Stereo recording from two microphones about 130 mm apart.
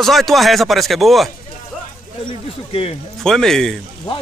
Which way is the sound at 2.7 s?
50° left (ahead or behind).